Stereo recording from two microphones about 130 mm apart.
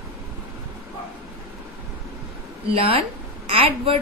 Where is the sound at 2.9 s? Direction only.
45° right (ahead or behind).